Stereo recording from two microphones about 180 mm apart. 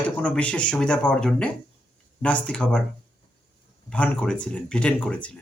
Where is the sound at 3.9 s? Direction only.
5° left (ahead or behind).